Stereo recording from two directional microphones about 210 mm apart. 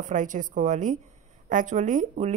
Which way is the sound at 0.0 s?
35° right (ahead or behind).